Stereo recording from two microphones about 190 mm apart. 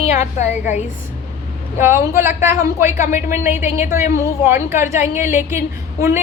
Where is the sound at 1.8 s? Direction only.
15° right (ahead or behind).